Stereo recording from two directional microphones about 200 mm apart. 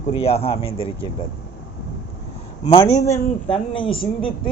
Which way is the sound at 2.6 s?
30° left (ahead or behind).